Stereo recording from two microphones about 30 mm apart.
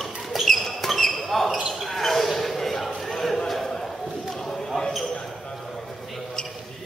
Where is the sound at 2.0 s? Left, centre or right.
Centre.